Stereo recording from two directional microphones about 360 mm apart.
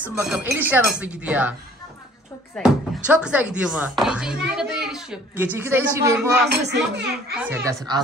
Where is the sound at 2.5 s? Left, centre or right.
Centre.